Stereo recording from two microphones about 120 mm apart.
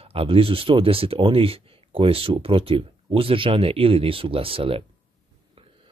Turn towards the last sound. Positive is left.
turn(degrees=-50)  # may be behind; listen again after turning